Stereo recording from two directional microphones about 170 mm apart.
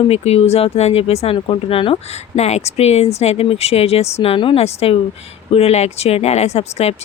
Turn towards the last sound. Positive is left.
turn(degrees=40)  # may be behind; listen again after turning